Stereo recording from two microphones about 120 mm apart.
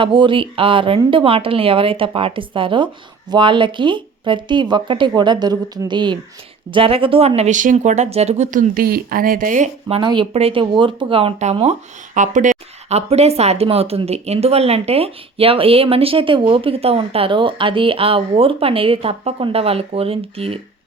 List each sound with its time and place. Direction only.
0.0 s speech: 45° right (ahead or behind); by 8.7 s 85° right
9.9 s speech: 40° right (ahead or behind)
10.3 s speech: 50° right (ahead or behind)
11.5 s speech: 65° right (ahead or behind)